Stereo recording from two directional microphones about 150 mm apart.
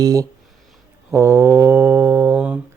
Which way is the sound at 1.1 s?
20° right (ahead or behind).